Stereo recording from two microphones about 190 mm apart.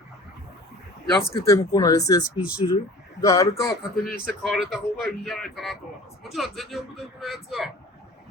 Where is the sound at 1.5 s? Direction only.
15° left (ahead or behind).